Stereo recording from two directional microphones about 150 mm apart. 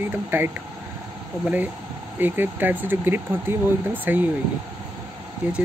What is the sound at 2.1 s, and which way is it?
Speech, 15° right (ahead or behind).